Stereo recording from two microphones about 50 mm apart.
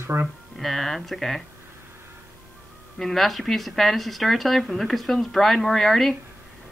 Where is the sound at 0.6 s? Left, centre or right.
Centre.